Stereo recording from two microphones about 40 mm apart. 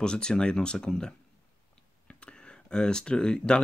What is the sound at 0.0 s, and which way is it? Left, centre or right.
Speech, centre.